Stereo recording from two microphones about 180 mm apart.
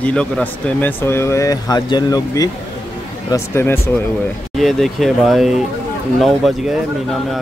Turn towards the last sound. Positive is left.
turn(degrees=0)  # may be behind; listen again after turning